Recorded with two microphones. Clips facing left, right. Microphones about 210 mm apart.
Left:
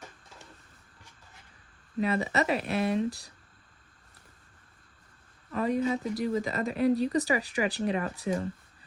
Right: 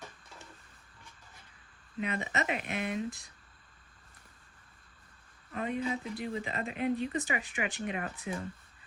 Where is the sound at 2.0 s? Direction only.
35° left (ahead or behind).